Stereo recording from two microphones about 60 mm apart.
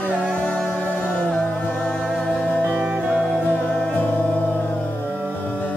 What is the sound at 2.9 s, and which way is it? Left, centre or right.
Music, right.